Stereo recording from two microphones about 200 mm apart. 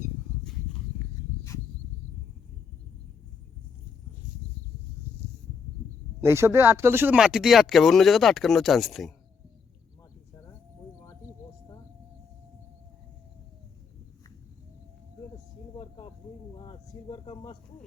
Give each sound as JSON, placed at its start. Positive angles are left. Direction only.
{"t": 6.2, "sound": "speech", "side_deg": -15}
{"t": 16.6, "sound": "speech", "side_deg": 25}